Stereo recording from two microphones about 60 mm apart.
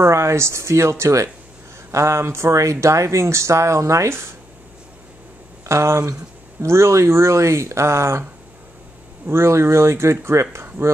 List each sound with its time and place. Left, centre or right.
0.0 s speech: right
5.7 s speech: right